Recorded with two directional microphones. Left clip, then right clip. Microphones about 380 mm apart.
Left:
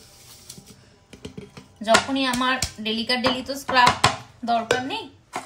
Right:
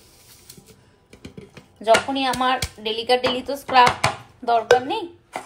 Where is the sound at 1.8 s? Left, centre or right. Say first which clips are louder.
Right 2 dB; centre.